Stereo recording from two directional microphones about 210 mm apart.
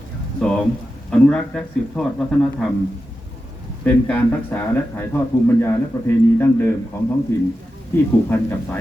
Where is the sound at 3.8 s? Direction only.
5° left (ahead or behind).